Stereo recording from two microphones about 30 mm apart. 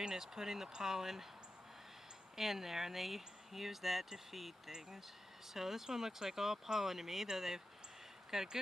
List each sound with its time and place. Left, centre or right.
0.0 s speech: centre
2.3 s speech: centre